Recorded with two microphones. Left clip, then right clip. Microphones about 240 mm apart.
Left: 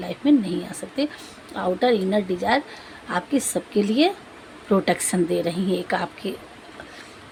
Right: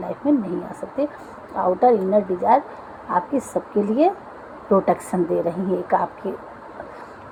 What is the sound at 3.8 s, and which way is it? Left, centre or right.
A woman's voice, left.